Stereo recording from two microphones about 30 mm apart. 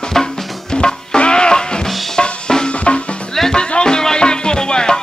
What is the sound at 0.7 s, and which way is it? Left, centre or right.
Music, left.